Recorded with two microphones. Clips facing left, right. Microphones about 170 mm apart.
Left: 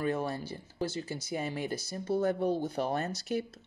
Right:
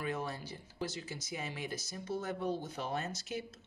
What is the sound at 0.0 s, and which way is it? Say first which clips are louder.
Speech: left 6 dB; 30° left (ahead or behind).